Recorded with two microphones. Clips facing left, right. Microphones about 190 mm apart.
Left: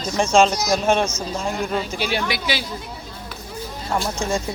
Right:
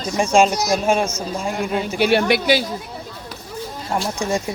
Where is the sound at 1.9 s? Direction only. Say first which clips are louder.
Right 8 dB; 55° right (ahead or behind).